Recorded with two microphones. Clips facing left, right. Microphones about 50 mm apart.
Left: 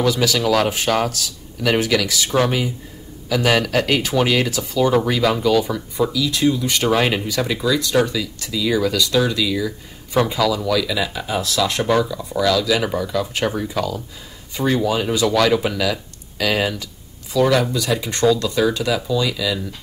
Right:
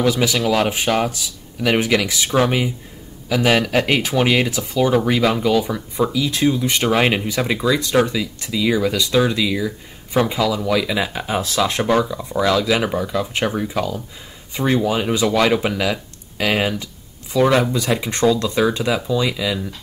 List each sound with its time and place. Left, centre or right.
0.0 s speech: right
4.8 s speech: centre
6.1 s speech: right